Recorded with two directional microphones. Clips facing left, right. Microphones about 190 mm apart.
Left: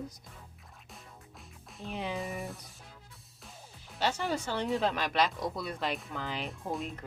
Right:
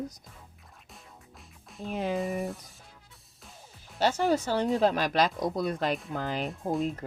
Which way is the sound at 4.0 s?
40° right (ahead or behind).